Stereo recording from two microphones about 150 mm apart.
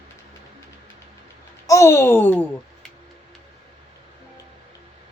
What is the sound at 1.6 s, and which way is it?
Speech, 20° left (ahead or behind).